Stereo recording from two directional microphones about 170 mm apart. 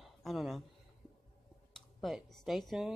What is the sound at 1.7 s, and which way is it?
Speech, centre (ahead or behind).